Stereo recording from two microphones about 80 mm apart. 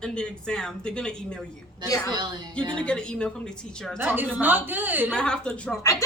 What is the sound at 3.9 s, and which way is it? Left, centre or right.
A woman's voice, right.